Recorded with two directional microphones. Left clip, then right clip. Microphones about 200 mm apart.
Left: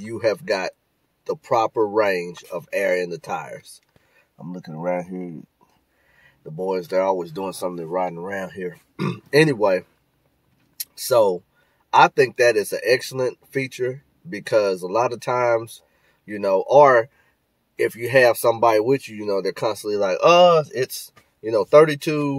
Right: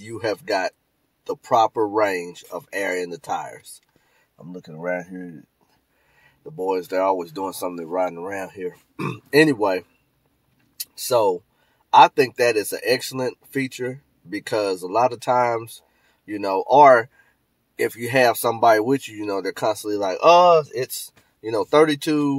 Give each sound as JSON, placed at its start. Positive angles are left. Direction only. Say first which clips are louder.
{"t": 0.0, "sound": "speech", "louder": "left 4 dB", "side_deg": 0}
{"t": 4.8, "sound": "speech", "louder": "left 2 dB", "side_deg": 25}
{"t": 6.5, "sound": "speech", "louder": "left 1 dB", "side_deg": 0}
{"t": 11.9, "sound": "speech", "louder": "right 2 dB", "side_deg": 0}